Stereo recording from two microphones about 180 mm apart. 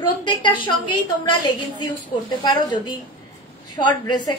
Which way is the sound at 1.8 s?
25° left (ahead or behind).